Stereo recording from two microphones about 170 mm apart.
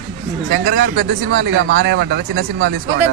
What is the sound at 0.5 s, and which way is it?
Speech, 65° right (ahead or behind).